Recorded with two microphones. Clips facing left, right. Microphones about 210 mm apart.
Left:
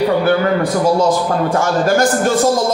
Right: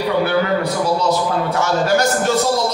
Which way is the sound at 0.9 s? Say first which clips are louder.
Left 3 dB; 50° left (ahead or behind).